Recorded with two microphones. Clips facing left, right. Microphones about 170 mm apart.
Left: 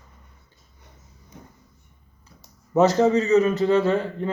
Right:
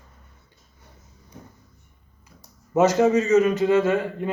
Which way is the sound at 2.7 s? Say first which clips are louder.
Even; 15° right (ahead or behind).